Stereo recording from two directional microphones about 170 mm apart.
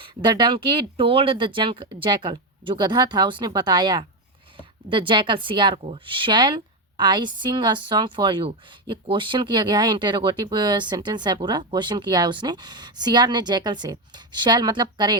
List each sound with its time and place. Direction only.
0.0 s a woman's voice: 25° right (ahead or behind)